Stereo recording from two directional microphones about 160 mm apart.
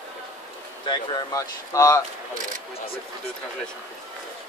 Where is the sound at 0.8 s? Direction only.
30° left (ahead or behind).